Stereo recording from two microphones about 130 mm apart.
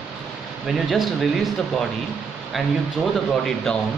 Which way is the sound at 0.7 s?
Centre (ahead or behind).